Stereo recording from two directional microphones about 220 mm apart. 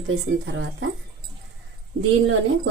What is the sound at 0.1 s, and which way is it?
Speech, 55° right (ahead or behind).